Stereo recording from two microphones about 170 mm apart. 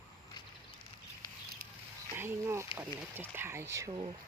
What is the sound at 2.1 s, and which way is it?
Speech, 15° right (ahead or behind).